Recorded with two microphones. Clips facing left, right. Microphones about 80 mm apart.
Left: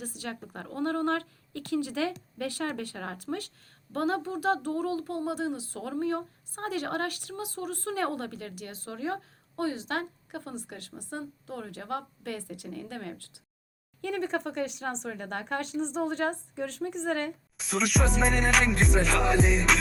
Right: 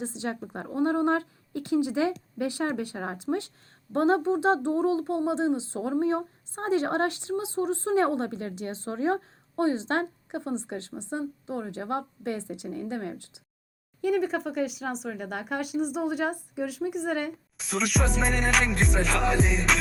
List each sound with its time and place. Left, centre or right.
0.0 s speech: right
14.0 s speech: centre